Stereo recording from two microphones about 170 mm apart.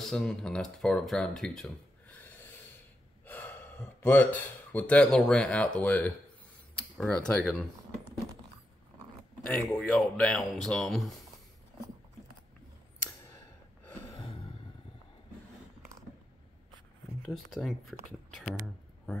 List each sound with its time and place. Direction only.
0.0 s speech: 5° left (ahead or behind)
3.3 s gasp: 10° left (ahead or behind)
4.0 s speech: 10° left (ahead or behind)
9.5 s speech: 5° left (ahead or behind)
14.1 s a sound: 30° left (ahead or behind)
17.3 s speech: centre (ahead or behind)